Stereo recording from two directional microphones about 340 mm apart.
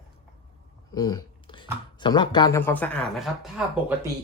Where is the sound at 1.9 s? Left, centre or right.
Centre.